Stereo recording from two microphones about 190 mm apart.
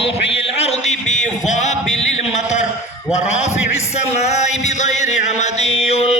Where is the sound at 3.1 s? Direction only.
35° left (ahead or behind).